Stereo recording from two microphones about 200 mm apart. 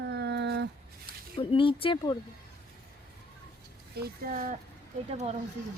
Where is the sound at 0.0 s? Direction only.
55° right (ahead or behind).